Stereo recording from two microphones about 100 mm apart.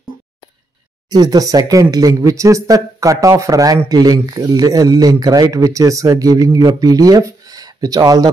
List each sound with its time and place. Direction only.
1.1 s a man's voice: 40° right (ahead or behind)